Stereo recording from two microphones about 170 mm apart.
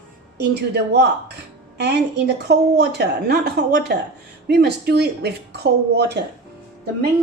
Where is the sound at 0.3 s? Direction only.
70° right (ahead or behind).